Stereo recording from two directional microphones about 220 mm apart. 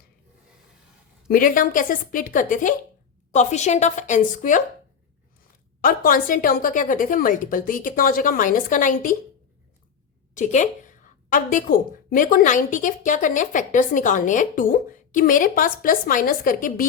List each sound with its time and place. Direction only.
1.3 s speech: 40° left (ahead or behind)
5.8 s speech: 40° left (ahead or behind)
10.3 s speech: 35° left (ahead or behind)